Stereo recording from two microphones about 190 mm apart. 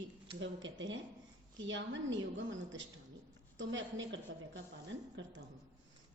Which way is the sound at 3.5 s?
80° right.